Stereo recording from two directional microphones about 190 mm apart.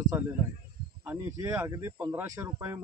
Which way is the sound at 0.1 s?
15° right (ahead or behind).